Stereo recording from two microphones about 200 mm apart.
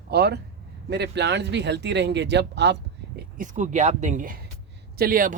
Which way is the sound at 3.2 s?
40° right (ahead or behind).